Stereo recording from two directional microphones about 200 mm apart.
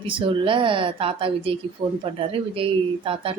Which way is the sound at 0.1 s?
25° right (ahead or behind).